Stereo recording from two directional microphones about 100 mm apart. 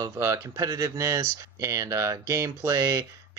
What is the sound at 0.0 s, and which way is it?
Speech, 30° right (ahead or behind).